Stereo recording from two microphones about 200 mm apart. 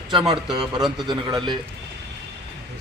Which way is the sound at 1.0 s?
20° right (ahead or behind).